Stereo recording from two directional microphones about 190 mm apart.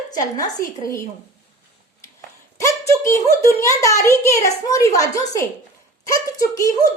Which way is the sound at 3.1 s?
15° left (ahead or behind).